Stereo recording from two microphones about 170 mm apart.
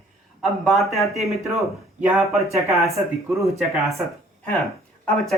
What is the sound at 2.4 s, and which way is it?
Speech, 15° right (ahead or behind).